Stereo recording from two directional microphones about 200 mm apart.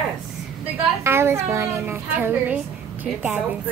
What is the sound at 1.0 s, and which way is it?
Dishes, 10° right (ahead or behind).